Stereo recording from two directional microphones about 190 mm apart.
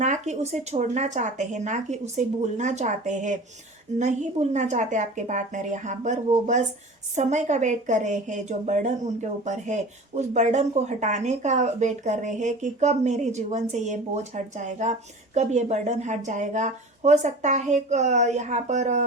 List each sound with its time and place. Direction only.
0.0 s a woman's voice: 40° right (ahead or behind)